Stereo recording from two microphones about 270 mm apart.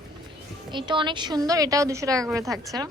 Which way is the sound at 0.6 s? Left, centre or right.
Centre.